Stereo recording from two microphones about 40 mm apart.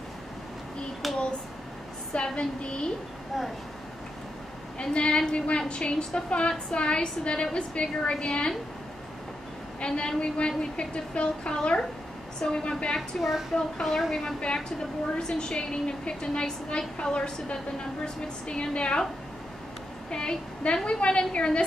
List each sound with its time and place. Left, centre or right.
1.0 s hands: centre
2.1 s a woman's voice: left
3.3 s a woman's voice: centre
4.7 s a woman's voice: left
9.8 s a woman's voice: left
13.2 s a woman's voice: centre
15.1 s a woman's voice: left
20.1 s a woman's voice: left